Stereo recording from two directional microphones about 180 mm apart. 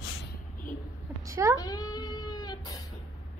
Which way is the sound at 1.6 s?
20° left (ahead or behind).